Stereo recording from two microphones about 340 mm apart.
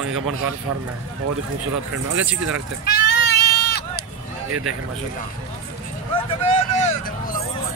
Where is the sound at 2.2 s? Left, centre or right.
Centre.